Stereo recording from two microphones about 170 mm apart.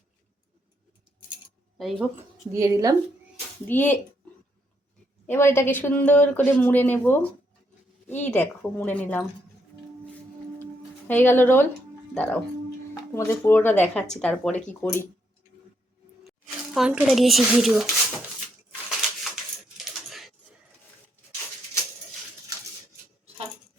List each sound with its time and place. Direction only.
1.8 s speech: centre (ahead or behind)
2.5 s a woman's voice: 20° right (ahead or behind)
3.7 s speech: 10° left (ahead or behind)
5.2 s speech: 15° left (ahead or behind)
8.3 s speech: 10° left (ahead or behind)
11.1 s speech: 10° left (ahead or behind)
16.7 s speech: 5° right (ahead or behind)
18.9 s a sound: 5° right (ahead or behind)